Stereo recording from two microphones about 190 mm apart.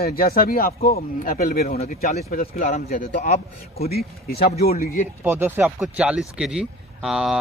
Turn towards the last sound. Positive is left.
turn(degrees=-5)  # may be behind; listen again after turning